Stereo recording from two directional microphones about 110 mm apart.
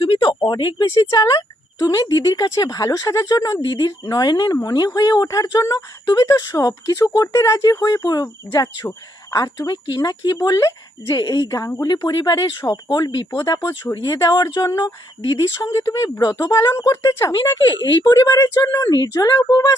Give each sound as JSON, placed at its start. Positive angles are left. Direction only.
{"t": 0.0, "sound": "a sound", "side_deg": 50}
{"t": 1.1, "sound": "speech", "side_deg": 40}
{"t": 15.2, "sound": "speech", "side_deg": 40}
{"t": 15.5, "sound": "speech", "side_deg": 30}
{"t": 17.3, "sound": "speech", "side_deg": 40}